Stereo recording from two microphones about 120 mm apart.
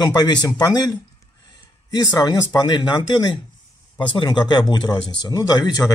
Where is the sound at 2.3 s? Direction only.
35° left (ahead or behind).